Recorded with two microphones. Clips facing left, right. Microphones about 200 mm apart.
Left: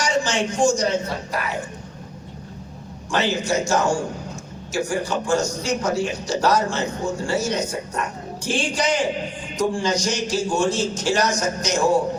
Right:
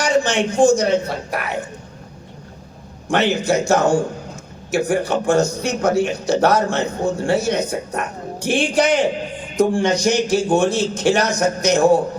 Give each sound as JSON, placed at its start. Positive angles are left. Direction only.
{"t": 0.0, "sound": "a sound", "side_deg": -60}
{"t": 0.6, "sound": "a man's voice", "side_deg": -60}
{"t": 3.1, "sound": "a man's voice", "side_deg": -60}